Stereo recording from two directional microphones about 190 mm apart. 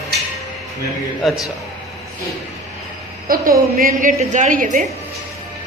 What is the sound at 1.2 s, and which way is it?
Speech, centre (ahead or behind).